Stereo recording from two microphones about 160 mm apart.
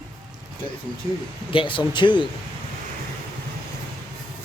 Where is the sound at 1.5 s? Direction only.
30° left (ahead or behind).